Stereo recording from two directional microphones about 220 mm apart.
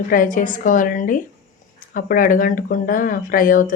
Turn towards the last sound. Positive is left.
turn(degrees=40)  # may be behind; listen again after turning